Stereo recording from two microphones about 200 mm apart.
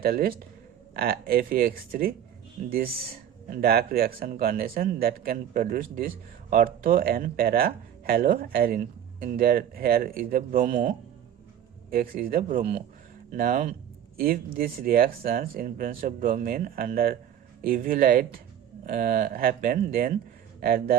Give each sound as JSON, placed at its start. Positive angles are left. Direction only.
{"t": 0.0, "sound": "a man's voice", "side_deg": -50}